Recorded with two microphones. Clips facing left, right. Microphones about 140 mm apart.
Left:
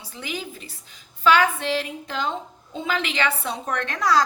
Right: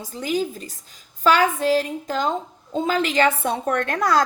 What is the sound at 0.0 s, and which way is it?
A woman's voice, 40° right (ahead or behind).